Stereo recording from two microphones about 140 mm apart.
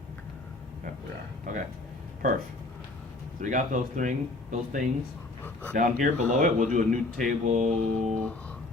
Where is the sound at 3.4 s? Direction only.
65° right (ahead or behind).